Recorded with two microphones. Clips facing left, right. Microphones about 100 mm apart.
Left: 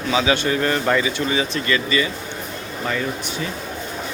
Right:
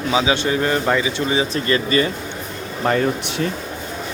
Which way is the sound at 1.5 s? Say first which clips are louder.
Right 2 dB; 35° right (ahead or behind).